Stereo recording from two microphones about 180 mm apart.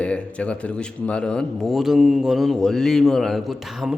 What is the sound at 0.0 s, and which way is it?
A man's voice, 5° left (ahead or behind).